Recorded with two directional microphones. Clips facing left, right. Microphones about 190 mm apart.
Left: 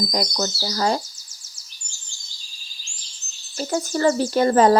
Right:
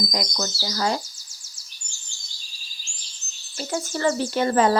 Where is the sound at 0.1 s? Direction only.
35° left (ahead or behind).